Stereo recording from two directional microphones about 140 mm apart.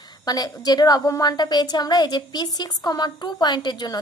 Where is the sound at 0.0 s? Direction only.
30° left (ahead or behind).